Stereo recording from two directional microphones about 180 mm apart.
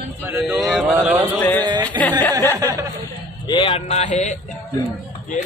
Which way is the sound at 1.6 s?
25° right (ahead or behind).